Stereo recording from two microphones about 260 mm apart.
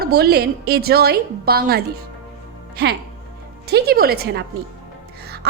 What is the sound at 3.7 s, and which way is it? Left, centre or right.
Speech, right.